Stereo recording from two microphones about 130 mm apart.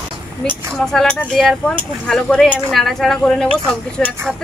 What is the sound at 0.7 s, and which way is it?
Speech, 5° left (ahead or behind).